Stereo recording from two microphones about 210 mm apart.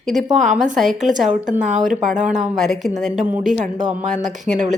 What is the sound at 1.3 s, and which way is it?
Speech, 35° right (ahead or behind).